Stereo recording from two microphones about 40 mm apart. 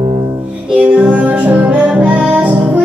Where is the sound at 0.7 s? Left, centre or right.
Right.